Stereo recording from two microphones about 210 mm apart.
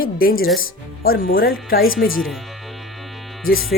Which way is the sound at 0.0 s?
45° left (ahead or behind).